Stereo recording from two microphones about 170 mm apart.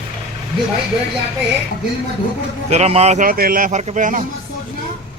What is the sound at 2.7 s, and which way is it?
A man's voice, 40° right (ahead or behind).